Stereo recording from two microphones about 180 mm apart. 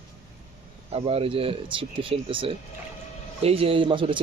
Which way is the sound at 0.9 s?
30° right (ahead or behind).